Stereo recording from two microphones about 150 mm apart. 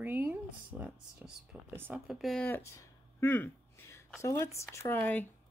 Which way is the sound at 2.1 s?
Centre (ahead or behind).